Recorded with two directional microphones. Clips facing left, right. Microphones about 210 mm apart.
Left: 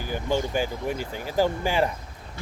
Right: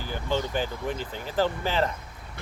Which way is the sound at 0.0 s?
10° left (ahead or behind).